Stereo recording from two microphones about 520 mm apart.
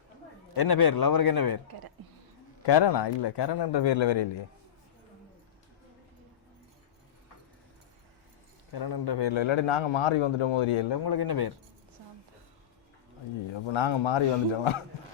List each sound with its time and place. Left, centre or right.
0.5 s speech: left
2.6 s speech: left
8.7 s a man's voice: left
13.5 s a man's voice: left